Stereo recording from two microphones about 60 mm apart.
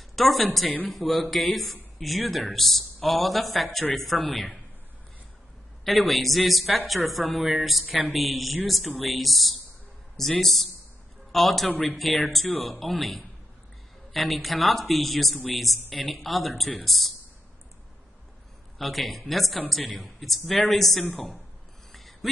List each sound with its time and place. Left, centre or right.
0.1 s a woman's voice: centre
5.9 s speech: centre
7.8 s speech: centre
8.1 s speech: centre
18.8 s speech: centre
21.9 s a sound: centre